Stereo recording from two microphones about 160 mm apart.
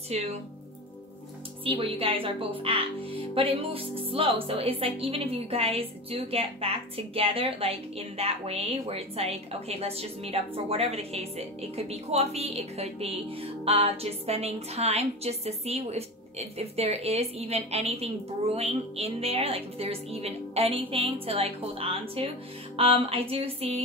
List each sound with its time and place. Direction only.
0.1 s speech: 40° right (ahead or behind)
1.6 s speech: 35° right (ahead or behind)